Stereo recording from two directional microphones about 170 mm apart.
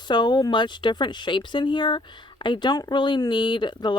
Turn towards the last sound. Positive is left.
turn(degrees=25)  # may be behind; listen again after turning